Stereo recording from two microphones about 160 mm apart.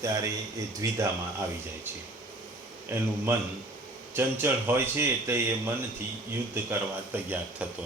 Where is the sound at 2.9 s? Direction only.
15° right (ahead or behind).